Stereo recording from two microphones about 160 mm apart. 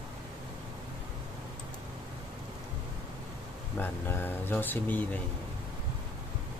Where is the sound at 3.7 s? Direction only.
15° left (ahead or behind).